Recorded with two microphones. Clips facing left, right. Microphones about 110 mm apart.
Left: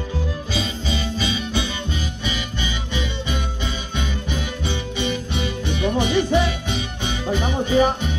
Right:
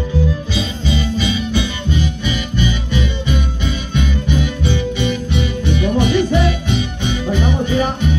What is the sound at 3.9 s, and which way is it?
Music, 30° left (ahead or behind).